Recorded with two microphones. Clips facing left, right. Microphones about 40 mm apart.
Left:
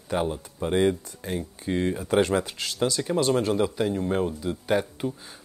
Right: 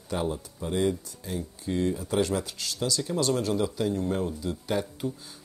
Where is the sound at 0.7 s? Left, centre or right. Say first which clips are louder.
Left 4 dB; left.